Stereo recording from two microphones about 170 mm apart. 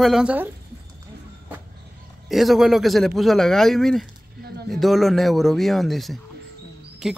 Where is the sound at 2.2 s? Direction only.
Centre (ahead or behind).